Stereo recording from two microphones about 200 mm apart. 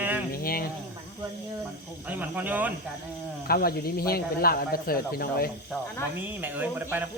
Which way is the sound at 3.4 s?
50° left (ahead or behind).